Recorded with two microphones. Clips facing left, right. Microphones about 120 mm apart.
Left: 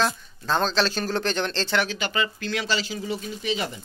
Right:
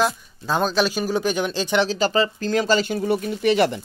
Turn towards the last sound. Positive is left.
turn(degrees=-65)  # may be behind; listen again after turning